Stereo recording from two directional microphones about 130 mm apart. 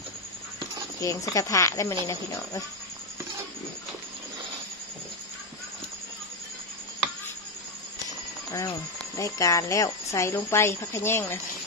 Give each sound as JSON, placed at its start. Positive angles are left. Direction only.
{"t": 1.0, "sound": "speech", "side_deg": 25}
{"t": 8.5, "sound": "speech", "side_deg": 25}